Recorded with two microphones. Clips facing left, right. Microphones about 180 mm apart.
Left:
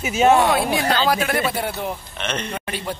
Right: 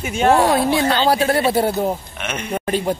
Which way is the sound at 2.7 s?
45° right (ahead or behind).